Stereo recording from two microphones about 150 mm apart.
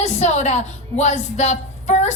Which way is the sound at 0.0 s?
50° left (ahead or behind).